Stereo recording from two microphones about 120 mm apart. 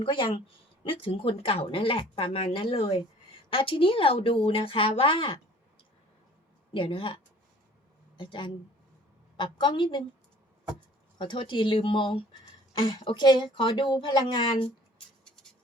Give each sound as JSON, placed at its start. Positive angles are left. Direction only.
{"t": 0.0, "sound": "speech", "side_deg": 45}
{"t": 6.7, "sound": "speech", "side_deg": 50}
{"t": 8.2, "sound": "speech", "side_deg": 40}
{"t": 11.2, "sound": "speech", "side_deg": 45}
{"t": 14.9, "sound": "scratch", "side_deg": 5}